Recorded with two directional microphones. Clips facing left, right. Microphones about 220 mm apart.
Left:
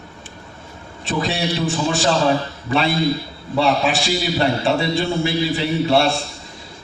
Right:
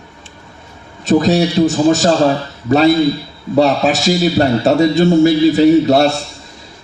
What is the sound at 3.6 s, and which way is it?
A man's voice, 40° right (ahead or behind).